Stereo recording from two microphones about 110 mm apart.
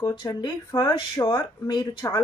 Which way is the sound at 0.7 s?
30° left (ahead or behind).